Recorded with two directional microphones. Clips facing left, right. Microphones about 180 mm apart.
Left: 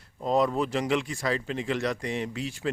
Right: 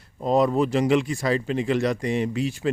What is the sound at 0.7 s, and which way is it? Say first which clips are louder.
Speech: right 6 dB; 5° right (ahead or behind).